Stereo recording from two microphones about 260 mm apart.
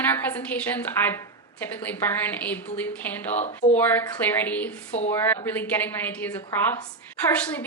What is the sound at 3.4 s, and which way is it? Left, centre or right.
Speech, left.